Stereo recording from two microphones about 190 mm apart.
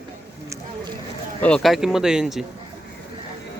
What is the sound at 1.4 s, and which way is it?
Speech, centre (ahead or behind).